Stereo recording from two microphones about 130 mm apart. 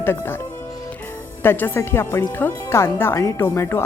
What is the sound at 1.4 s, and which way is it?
A woman's voice, 15° left (ahead or behind).